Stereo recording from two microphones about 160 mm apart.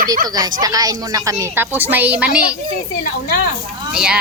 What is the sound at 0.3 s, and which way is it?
A woman's voice, 25° right (ahead or behind).